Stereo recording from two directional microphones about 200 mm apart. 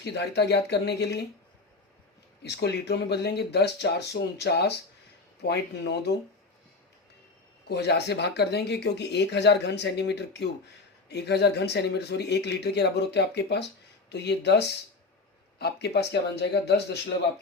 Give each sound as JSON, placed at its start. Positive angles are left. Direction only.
{"t": 0.0, "sound": "speech", "side_deg": 60}
{"t": 2.4, "sound": "speech", "side_deg": 55}
{"t": 7.7, "sound": "speech", "side_deg": 55}